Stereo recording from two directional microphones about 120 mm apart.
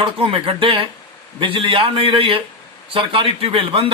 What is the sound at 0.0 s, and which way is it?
A man's voice, 45° right (ahead or behind).